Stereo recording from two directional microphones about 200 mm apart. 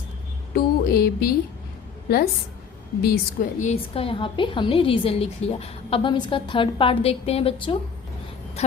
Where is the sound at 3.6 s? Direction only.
30° left (ahead or behind).